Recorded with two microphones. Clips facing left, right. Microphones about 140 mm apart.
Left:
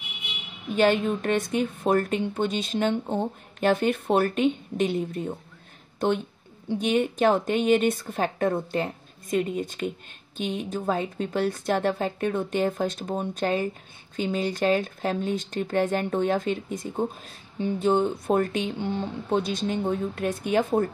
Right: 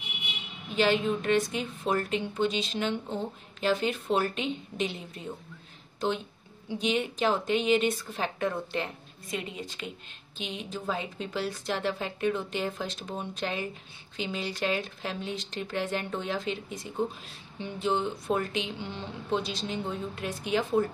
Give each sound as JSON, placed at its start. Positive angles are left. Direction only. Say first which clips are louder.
{"t": 0.7, "sound": "a woman's voice", "louder": "left 4 dB", "side_deg": 50}